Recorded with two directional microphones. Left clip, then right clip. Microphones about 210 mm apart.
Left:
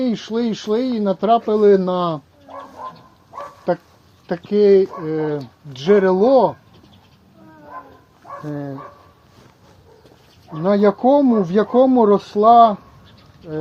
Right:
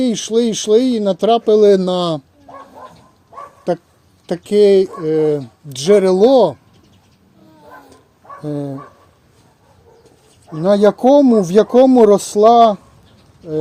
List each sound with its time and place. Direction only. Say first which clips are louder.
0.0 s speech: right 6 dB; 55° right (ahead or behind)
3.7 s speech: right 2 dB; 50° right (ahead or behind)
8.4 s speech: right 6 dB; 50° right (ahead or behind)
10.6 s speech: right 4 dB; 55° right (ahead or behind)